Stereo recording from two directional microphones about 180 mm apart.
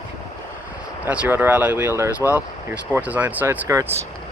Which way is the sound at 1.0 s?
10° right (ahead or behind).